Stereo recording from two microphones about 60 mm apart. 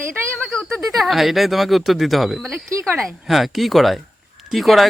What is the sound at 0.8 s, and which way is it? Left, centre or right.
Speech, centre.